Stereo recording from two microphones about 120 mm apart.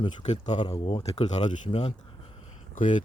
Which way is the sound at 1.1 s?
75° left (ahead or behind).